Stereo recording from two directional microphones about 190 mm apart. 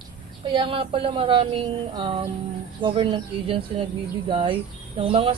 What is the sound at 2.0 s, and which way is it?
Music, 30° right (ahead or behind).